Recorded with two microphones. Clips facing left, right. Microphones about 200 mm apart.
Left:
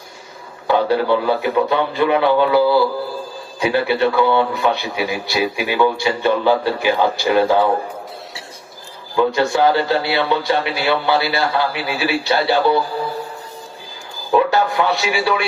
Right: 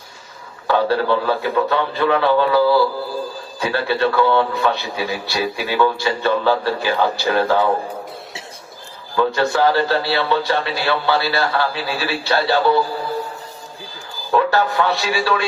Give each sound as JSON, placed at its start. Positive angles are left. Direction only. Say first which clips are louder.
{"t": 0.7, "sound": "a man's voice", "louder": "left 1 dB", "side_deg": 15}
{"t": 9.1, "sound": "a man's voice", "louder": "left 1 dB", "side_deg": 15}
{"t": 14.3, "sound": "a man's voice", "louder": "left 1 dB", "side_deg": 15}